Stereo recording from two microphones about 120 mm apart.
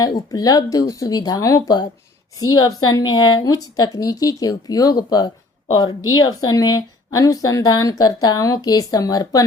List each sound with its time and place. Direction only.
0.0 s speech: 35° left (ahead or behind)